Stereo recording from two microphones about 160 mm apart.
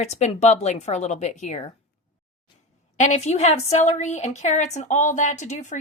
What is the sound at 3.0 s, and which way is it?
A woman's voice, 45° left (ahead or behind).